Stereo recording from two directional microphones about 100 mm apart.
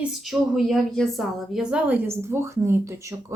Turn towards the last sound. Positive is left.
turn(degrees=-30)  # may be behind; listen again after turning